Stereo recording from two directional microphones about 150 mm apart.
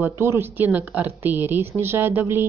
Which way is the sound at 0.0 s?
15° right (ahead or behind).